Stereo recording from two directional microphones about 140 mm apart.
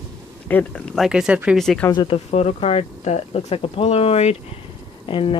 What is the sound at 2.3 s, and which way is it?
Speech, 50° left (ahead or behind).